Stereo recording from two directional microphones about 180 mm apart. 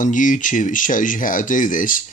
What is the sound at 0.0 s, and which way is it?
Speech, 45° left (ahead or behind).